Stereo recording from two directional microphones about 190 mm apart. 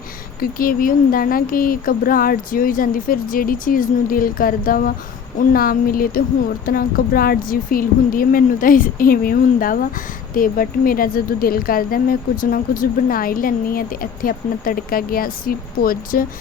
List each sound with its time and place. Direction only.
0.6 s speech: 50° left (ahead or behind)